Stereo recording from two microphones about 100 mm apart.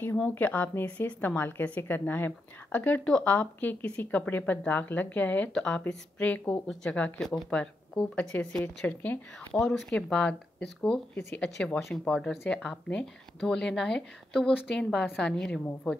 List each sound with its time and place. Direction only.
0.3 s a woman's voice: 15° left (ahead or behind)
9.6 s a woman's voice: 5° left (ahead or behind)
11.3 s a woman's voice: 10° left (ahead or behind)
14.9 s a woman's voice: 5° right (ahead or behind)
15.2 s a woman's voice: 10° left (ahead or behind)